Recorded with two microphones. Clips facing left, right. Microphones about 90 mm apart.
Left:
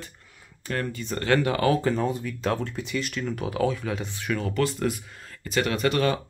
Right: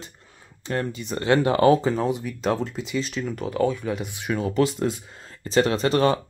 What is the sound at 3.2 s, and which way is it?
Speech, centre (ahead or behind).